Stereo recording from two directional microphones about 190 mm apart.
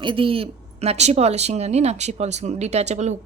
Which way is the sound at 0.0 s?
25° right (ahead or behind).